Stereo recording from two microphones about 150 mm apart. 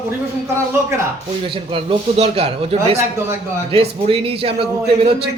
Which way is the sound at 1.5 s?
40° right (ahead or behind).